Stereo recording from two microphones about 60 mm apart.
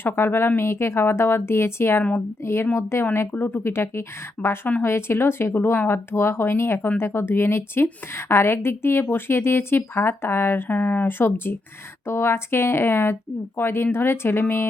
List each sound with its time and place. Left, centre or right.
0.0 s speech: left
4.4 s speech: left
4.8 s speech: left